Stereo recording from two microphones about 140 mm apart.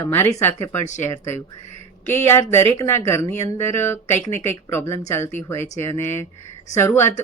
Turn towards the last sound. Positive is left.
turn(degrees=15)  # may be behind; listen again after turning